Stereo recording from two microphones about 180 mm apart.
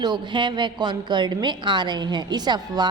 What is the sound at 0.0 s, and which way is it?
A woman's voice, 25° right (ahead or behind).